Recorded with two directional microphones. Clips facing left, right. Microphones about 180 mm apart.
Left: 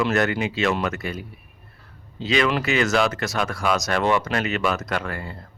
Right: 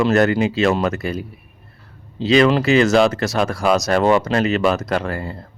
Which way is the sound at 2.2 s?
35° right (ahead or behind).